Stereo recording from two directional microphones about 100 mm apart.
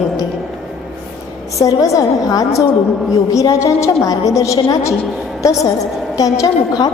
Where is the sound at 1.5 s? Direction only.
35° left (ahead or behind).